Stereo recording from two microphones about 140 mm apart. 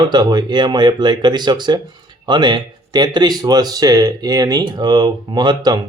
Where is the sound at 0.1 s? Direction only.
30° right (ahead or behind).